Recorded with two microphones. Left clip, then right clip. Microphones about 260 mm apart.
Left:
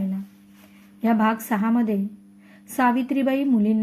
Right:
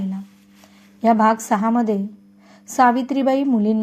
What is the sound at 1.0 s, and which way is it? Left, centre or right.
A woman's voice, centre.